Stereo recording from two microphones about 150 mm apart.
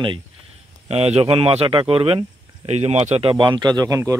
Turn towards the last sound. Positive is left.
turn(degrees=-20)  # may be behind; listen again after turning